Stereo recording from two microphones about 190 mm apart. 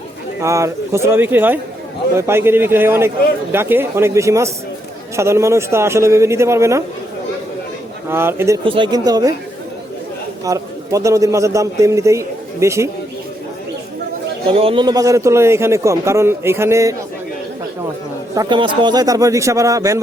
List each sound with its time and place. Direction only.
0.4 s a man's voice: 15° right (ahead or behind)
8.1 s a man's voice: 10° right (ahead or behind)
8.6 s speech: 25° right (ahead or behind)
10.4 s a man's voice: 15° right (ahead or behind)
14.4 s a man's voice: 30° right (ahead or behind)
18.3 s a man's voice: 25° right (ahead or behind)